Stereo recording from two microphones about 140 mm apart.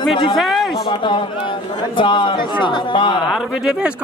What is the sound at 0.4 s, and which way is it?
Speech, centre (ahead or behind).